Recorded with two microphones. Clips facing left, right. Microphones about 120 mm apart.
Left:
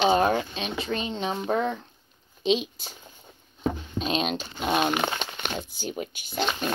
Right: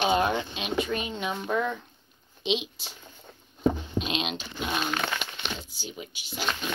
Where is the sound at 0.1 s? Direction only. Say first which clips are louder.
Left 3 dB; 35° left (ahead or behind).